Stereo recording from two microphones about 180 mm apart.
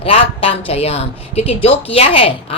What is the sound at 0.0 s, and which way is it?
A woman's voice, 35° left (ahead or behind).